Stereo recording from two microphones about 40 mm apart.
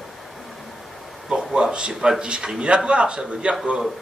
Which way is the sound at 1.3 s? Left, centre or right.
Right.